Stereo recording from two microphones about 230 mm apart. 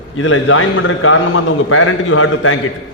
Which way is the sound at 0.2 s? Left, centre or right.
Left.